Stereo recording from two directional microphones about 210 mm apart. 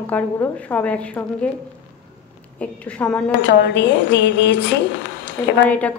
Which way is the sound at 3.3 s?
55° left (ahead or behind).